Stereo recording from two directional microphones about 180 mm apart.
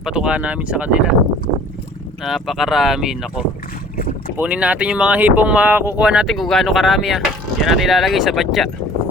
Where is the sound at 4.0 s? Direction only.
50° left (ahead or behind).